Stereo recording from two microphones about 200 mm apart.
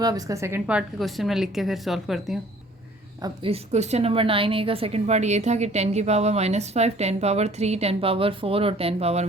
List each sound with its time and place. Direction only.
0.0 s a woman's voice: 20° right (ahead or behind); by 2.4 s centre (ahead or behind)
3.2 s a woman's voice: 25° right (ahead or behind)